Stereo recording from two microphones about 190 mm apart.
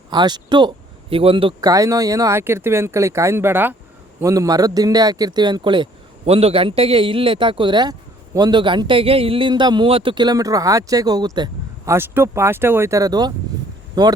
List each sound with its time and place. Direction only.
0.1 s speech: 20° right (ahead or behind)